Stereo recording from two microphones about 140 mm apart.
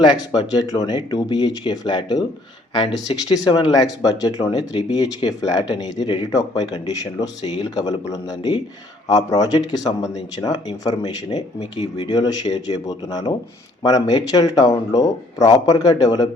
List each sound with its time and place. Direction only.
0.0 s speech: 30° left (ahead or behind)
3.3 s speech: 30° left (ahead or behind)